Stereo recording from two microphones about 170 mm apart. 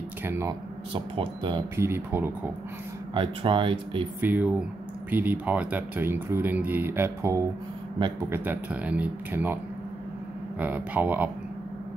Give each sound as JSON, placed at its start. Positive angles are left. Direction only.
{"t": 0.2, "sound": "speech", "side_deg": -15}
{"t": 0.9, "sound": "speech", "side_deg": -30}
{"t": 1.8, "sound": "speech", "side_deg": -15}
{"t": 3.2, "sound": "speech", "side_deg": -30}
{"t": 4.2, "sound": "speech", "side_deg": -10}
{"t": 10.6, "sound": "speech", "side_deg": -10}